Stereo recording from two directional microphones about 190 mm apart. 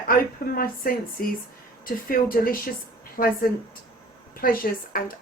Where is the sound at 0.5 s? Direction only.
50° left (ahead or behind).